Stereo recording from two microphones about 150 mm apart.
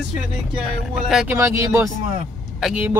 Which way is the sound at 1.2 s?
15° right (ahead or behind).